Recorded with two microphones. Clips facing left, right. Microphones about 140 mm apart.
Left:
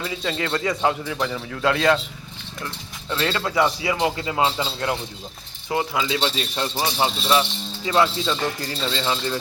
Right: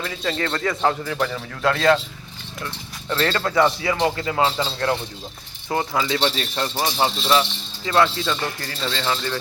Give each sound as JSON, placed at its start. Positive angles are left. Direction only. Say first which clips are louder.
{"t": 0.0, "sound": "a man's voice", "louder": "right 1 dB", "side_deg": 10}
{"t": 3.1, "sound": "a man's voice", "louder": "right 2 dB", "side_deg": 10}
{"t": 8.7, "sound": "speech", "louder": "even", "side_deg": 25}